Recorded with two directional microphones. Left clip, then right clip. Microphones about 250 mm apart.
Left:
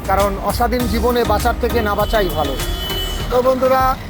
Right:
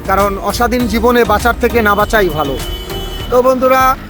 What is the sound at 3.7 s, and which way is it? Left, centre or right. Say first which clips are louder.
Speech: right 5 dB; right.